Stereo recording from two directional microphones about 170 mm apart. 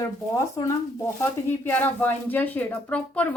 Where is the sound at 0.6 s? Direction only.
25° left (ahead or behind).